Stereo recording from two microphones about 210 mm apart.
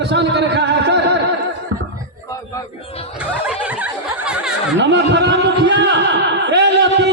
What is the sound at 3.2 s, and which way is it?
Snicker, 5° right (ahead or behind).